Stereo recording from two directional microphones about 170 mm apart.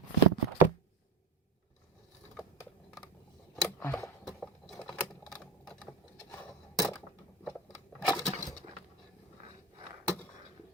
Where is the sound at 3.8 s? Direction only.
15° left (ahead or behind).